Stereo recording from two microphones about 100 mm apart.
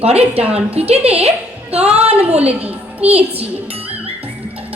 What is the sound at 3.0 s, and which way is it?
Speech, 80° right.